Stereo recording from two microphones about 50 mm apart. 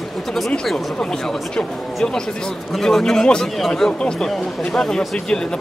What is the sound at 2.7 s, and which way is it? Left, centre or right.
Speech, centre.